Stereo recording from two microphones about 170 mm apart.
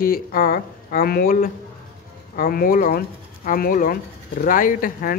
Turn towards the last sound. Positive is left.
turn(degrees=55)  # may be behind; listen again after turning